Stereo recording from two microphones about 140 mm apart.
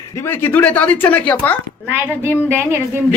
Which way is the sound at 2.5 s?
20° right (ahead or behind).